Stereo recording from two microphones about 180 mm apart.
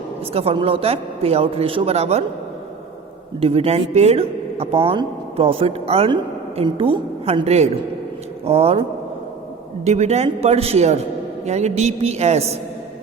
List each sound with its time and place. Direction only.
0.3 s speech: 30° right (ahead or behind)
3.4 s speech: 35° right (ahead or behind)
9.8 s speech: 40° right (ahead or behind)